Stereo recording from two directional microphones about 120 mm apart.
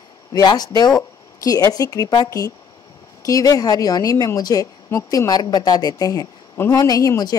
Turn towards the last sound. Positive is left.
turn(degrees=30)  # may be behind; listen again after turning